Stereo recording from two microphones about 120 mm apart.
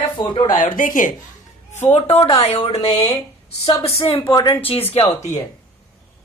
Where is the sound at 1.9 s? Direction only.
60° left (ahead or behind).